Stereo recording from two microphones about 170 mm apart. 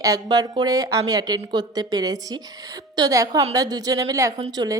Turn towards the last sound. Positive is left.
turn(degrees=-25)  # may be behind; listen again after turning